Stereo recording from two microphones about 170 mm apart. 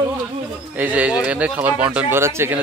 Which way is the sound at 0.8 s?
10° right (ahead or behind).